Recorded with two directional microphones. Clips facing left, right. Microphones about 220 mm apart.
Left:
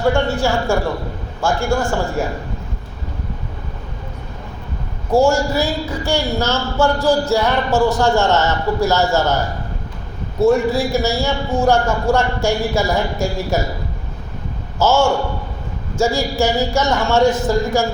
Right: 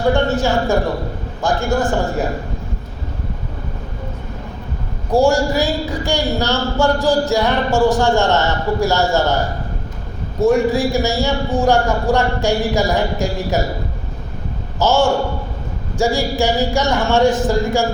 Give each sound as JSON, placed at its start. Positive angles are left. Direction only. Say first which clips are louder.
{"t": 0.1, "sound": "speech", "louder": "right 4 dB", "side_deg": -15}
{"t": 5.1, "sound": "speech", "louder": "even", "side_deg": -15}
{"t": 10.4, "sound": "speech", "louder": "even", "side_deg": -15}
{"t": 14.8, "sound": "speech", "louder": "even", "side_deg": -15}